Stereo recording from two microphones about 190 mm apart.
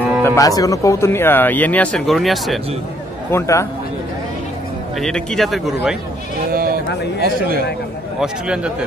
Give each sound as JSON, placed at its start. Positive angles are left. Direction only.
{"t": 0.2, "sound": "speech", "side_deg": 20}
{"t": 3.3, "sound": "speech", "side_deg": 15}
{"t": 5.0, "sound": "speech", "side_deg": 5}
{"t": 6.5, "sound": "a sound", "side_deg": -50}
{"t": 7.2, "sound": "speech", "side_deg": -50}
{"t": 8.2, "sound": "speech", "side_deg": -5}